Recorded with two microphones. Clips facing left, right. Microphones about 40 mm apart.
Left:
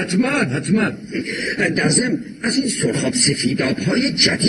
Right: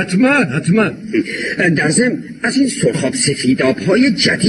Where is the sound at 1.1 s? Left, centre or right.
Right.